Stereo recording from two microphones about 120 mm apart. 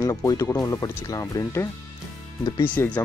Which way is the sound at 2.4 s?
40° left (ahead or behind).